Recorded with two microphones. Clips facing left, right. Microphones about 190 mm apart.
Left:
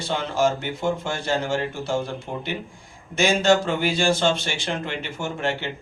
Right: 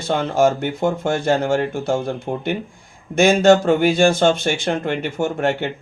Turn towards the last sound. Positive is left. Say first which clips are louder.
# right 7 dB
turn(degrees=-50)  # may be behind; listen again after turning